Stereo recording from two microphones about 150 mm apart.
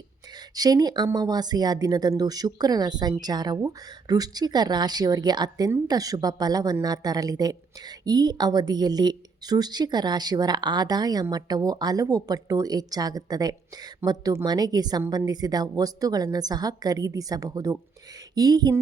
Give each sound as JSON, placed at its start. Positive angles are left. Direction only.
{"t": 0.3, "sound": "speech", "side_deg": -25}